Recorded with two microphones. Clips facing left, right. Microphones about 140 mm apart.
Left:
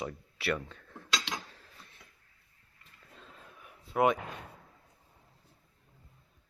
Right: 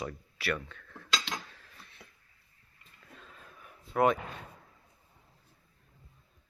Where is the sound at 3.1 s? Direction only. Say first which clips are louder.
Even; 20° left (ahead or behind).